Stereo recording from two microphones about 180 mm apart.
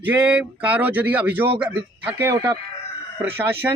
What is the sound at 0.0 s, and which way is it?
Speech, 10° right (ahead or behind).